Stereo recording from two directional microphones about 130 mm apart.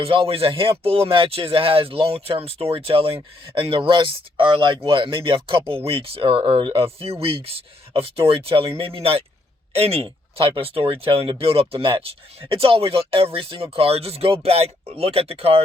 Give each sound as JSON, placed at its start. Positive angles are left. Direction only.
{"t": 0.0, "sound": "speech", "side_deg": -45}